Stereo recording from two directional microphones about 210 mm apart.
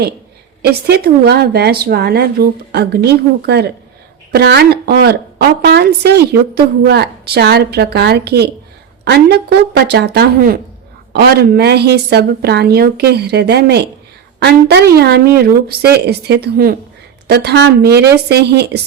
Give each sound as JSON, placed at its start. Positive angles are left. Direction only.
{"t": 0.6, "sound": "a woman's voice", "side_deg": -50}